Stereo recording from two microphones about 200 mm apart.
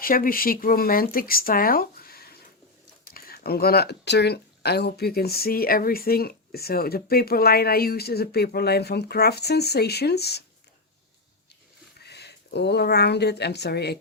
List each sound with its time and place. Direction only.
0.0 s speech: 45° left (ahead or behind)
12.0 s speech: 55° left (ahead or behind)